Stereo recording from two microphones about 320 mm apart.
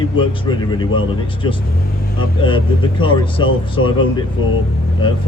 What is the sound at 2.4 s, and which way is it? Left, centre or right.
Speech, centre.